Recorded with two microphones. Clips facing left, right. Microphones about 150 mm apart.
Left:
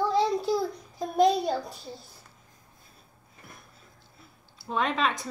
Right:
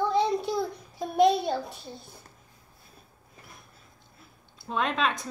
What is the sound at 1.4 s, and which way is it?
Speech, centre (ahead or behind).